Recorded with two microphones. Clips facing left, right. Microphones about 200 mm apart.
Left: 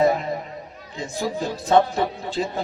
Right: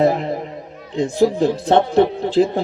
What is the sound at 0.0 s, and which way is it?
Chatter, 65° right (ahead or behind).